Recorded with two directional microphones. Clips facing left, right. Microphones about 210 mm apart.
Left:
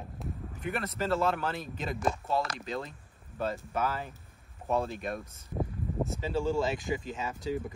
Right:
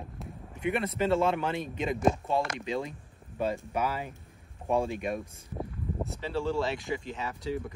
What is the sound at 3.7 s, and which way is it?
Speech, 10° right (ahead or behind).